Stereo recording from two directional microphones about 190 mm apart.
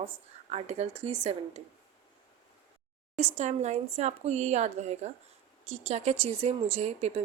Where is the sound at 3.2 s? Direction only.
35° right (ahead or behind).